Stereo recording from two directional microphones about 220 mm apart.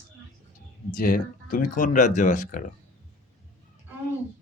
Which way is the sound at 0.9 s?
40° left (ahead or behind).